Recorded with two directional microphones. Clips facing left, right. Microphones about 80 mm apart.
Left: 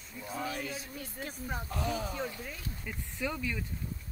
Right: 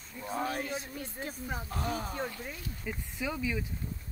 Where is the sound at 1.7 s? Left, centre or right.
Right.